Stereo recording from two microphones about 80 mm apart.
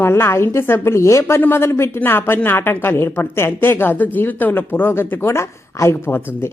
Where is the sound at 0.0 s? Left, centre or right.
Left.